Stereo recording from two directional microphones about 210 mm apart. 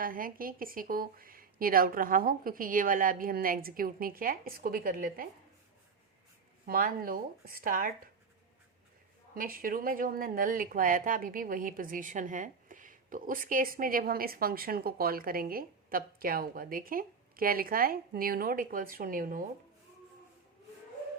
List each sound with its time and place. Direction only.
0.0 s speech: 40° right (ahead or behind)
6.7 s speech: 45° right (ahead or behind)
9.3 s speech: 40° right (ahead or behind)